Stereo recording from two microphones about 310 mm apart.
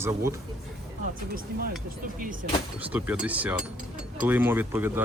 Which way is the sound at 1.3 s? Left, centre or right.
Right.